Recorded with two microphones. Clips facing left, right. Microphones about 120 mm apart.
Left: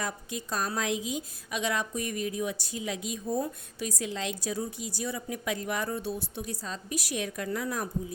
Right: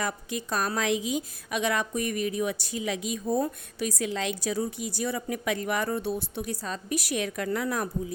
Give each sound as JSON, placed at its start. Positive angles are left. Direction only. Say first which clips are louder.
{"t": 0.0, "sound": "a woman's voice", "louder": "right 4 dB", "side_deg": -70}